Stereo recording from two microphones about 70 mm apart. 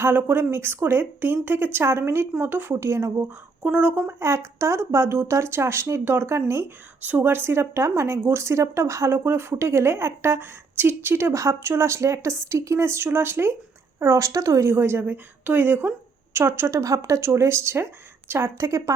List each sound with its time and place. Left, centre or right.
0.0 s speech: right
3.6 s speech: centre
4.2 s speech: right
7.0 s speech: right
14.0 s speech: right
14.7 s speech: right
16.8 s speech: right
18.5 s speech: right